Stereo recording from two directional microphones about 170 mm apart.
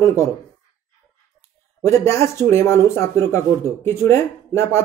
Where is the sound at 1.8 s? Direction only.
15° left (ahead or behind).